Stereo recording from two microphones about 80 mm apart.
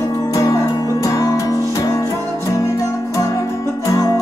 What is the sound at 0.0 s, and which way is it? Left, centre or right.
Music, left.